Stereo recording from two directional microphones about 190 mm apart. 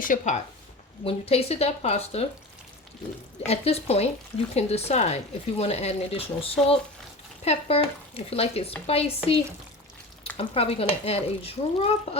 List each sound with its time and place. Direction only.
0.0 s speech: 45° left (ahead or behind)
1.0 s speech: 30° left (ahead or behind)
3.4 s speech: 35° left (ahead or behind)